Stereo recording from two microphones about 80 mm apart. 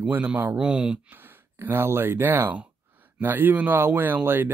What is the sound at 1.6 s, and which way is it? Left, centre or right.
Speech, right.